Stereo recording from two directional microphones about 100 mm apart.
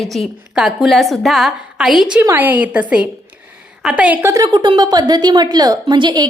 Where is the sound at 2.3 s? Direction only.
15° right (ahead or behind).